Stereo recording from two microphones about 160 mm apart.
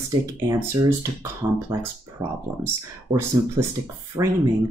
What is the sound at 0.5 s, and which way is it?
Speech, 15° right (ahead or behind).